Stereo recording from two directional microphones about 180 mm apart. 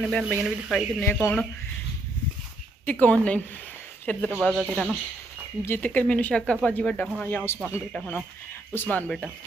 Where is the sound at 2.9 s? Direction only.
10° left (ahead or behind).